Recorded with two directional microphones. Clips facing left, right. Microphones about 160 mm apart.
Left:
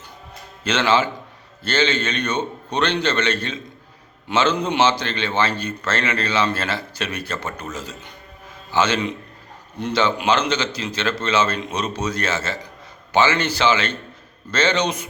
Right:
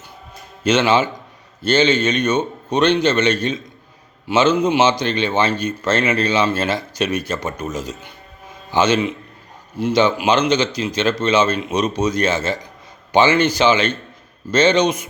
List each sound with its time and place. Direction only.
0.6 s speech: 10° right (ahead or behind)